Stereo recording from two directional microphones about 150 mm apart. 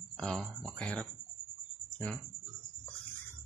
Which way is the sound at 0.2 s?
5° left (ahead or behind).